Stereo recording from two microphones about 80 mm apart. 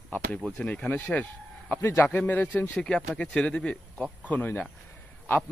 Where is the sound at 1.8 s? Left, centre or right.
Left.